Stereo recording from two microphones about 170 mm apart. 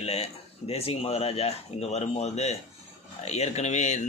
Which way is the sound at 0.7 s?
35° left (ahead or behind).